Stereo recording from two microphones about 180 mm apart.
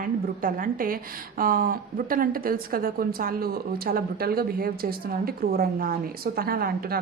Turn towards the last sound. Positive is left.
turn(degrees=-55)  # may be behind; listen again after turning